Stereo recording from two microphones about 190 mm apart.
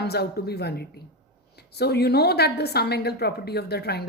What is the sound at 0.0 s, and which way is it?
A woman's voice, 55° left (ahead or behind).